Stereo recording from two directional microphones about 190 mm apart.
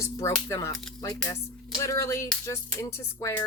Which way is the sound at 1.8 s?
15° left (ahead or behind).